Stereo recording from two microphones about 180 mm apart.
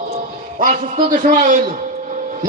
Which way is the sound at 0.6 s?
50° right (ahead or behind).